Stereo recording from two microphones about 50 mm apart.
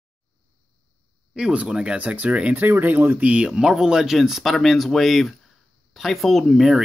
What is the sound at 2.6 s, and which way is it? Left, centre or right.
Speech, right.